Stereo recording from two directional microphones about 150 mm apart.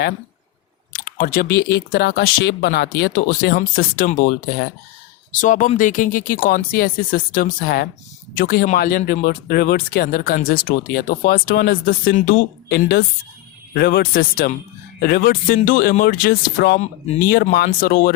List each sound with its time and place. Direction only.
0.9 s speech: 70° left (ahead or behind)
5.3 s speech: 60° left (ahead or behind)
12.6 s a woman's voice: 90° left; by 18.1 s 75° left (ahead or behind)